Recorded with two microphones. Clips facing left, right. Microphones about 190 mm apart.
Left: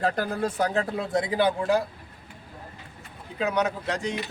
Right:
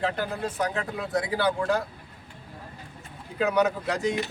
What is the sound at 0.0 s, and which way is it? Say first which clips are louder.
A man's voice: left 3 dB; 40° left (ahead or behind).